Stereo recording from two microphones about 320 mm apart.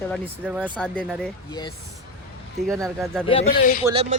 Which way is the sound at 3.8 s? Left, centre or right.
Centre.